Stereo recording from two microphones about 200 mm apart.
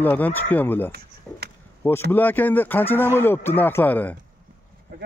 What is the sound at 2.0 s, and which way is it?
A man's voice, 10° left (ahead or behind).